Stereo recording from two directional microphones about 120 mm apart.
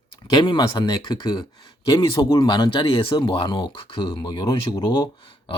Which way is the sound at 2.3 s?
35° left (ahead or behind).